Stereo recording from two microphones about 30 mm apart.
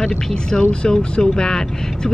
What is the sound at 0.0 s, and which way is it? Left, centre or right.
Speech, left.